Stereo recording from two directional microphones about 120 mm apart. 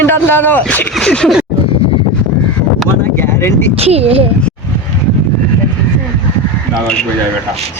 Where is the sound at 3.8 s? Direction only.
60° right (ahead or behind).